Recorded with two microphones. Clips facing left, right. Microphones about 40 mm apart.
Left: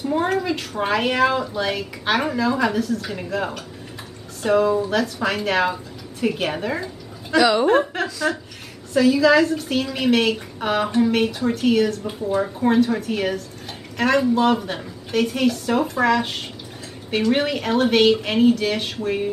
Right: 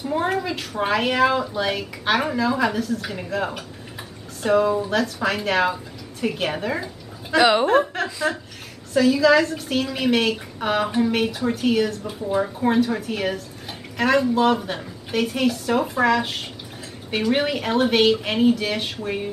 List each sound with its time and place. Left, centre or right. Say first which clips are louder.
0.0 s a woman's voice: left 2 dB; centre
7.3 s a woman's voice: even; right
7.6 s a woman's voice: left 1 dB; centre